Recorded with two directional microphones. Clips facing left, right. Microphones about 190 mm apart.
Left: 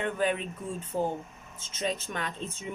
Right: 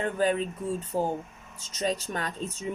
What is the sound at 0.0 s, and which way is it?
A woman's voice, 35° right (ahead or behind).